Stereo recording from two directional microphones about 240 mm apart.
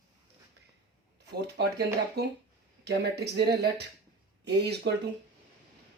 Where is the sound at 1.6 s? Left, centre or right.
Right.